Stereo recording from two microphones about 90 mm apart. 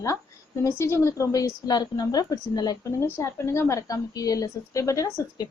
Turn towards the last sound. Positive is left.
turn(degrees=40)  # may be behind; listen again after turning